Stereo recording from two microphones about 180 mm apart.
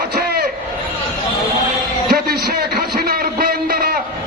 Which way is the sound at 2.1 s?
55° right (ahead or behind).